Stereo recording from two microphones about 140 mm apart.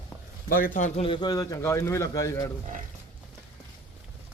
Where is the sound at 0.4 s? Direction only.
85° left.